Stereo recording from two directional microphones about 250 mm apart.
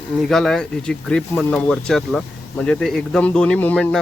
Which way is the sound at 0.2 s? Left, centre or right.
Centre.